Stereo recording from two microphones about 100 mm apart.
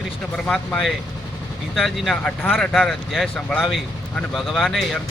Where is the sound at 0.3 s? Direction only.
5° left (ahead or behind).